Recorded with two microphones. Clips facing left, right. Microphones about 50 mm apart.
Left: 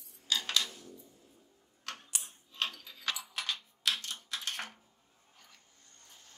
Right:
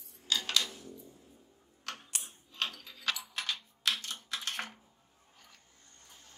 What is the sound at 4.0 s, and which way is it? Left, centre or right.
Typing, centre.